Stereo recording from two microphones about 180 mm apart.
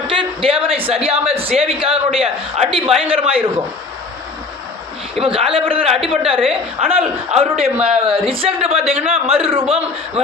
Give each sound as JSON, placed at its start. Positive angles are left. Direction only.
{"t": 0.1, "sound": "a man's voice", "side_deg": -30}
{"t": 5.1, "sound": "a man's voice", "side_deg": -30}